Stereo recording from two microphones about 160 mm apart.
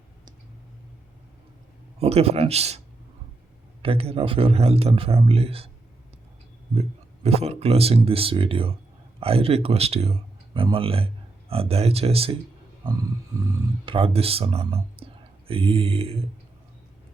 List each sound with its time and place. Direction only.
2.0 s speech: 40° right (ahead or behind)
3.8 s speech: 35° right (ahead or behind)
6.7 s speech: 40° right (ahead or behind)
13.8 s speech: 35° right (ahead or behind)